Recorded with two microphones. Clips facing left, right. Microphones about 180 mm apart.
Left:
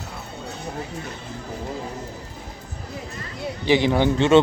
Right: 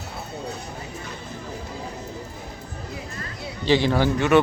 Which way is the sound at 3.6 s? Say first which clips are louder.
Left 1 dB; 15° left (ahead or behind).